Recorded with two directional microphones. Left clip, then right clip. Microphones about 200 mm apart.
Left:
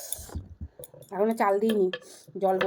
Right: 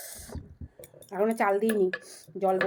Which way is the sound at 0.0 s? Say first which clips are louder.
Left 2 dB; 15° left (ahead or behind).